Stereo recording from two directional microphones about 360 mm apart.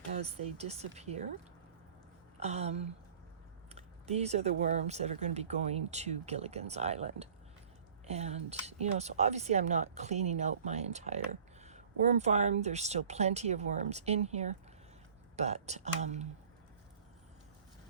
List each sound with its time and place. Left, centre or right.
0.2 s speech: centre
2.4 s speech: centre